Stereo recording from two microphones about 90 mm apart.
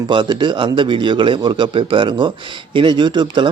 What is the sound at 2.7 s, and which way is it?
Speech, 60° right (ahead or behind).